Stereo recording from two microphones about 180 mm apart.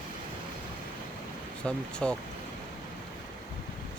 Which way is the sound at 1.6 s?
5° left (ahead or behind).